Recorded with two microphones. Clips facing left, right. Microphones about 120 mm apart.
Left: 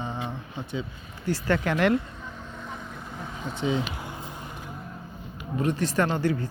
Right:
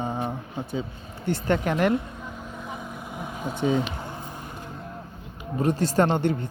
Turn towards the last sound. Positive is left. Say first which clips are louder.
# right 3 dB
turn(degrees=-30)  # may be behind; listen again after turning